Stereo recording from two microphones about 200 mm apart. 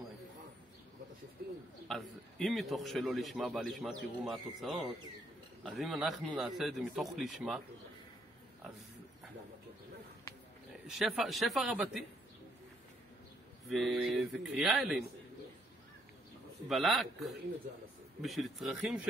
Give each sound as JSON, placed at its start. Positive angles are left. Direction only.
{"t": 1.9, "sound": "a man's voice", "side_deg": 0}
{"t": 10.9, "sound": "a man's voice", "side_deg": 0}
{"t": 13.7, "sound": "a man's voice", "side_deg": 0}
{"t": 16.6, "sound": "a man's voice", "side_deg": 0}